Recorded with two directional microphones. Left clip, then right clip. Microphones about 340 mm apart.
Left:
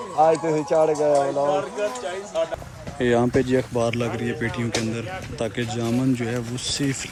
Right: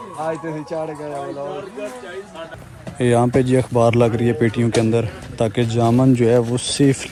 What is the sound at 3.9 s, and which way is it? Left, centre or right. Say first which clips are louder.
Speech: right 9 dB; centre.